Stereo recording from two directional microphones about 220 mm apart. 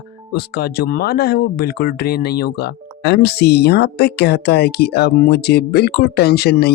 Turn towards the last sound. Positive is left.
turn(degrees=45)  # may be behind; listen again after turning